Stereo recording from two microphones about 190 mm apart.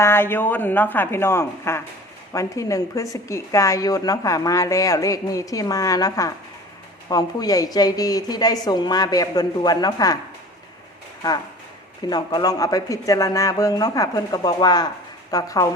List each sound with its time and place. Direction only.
0.0 s a woman's voice: 10° left (ahead or behind)
12.0 s speech: 20° left (ahead or behind)